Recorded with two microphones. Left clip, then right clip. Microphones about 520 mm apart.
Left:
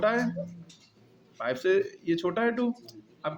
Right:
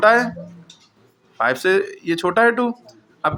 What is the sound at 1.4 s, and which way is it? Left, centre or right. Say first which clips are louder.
Speech: right 9 dB; left.